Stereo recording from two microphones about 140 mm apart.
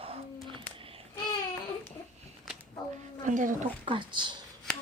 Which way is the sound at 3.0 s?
65° right (ahead or behind).